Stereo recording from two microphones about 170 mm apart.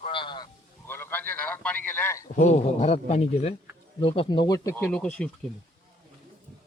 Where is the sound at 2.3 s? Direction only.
45° left (ahead or behind); by 5.3 s 5° left (ahead or behind).